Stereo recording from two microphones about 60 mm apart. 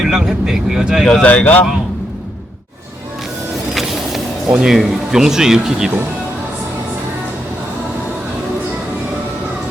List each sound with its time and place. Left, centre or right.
0.0 s speech: centre
1.2 s speech: left
4.4 s speech: centre